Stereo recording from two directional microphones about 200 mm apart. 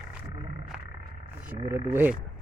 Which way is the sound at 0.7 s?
5° right (ahead or behind).